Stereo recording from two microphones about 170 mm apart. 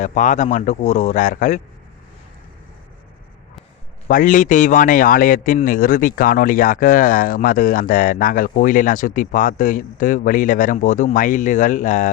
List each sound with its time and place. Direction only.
0.0 s speech: 45° left (ahead or behind)
4.1 s speech: 50° left (ahead or behind)